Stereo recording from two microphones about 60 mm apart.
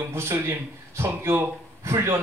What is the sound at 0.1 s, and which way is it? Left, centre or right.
A man's voice, right.